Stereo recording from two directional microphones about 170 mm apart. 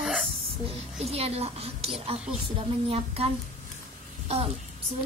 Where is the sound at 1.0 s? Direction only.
35° right (ahead or behind).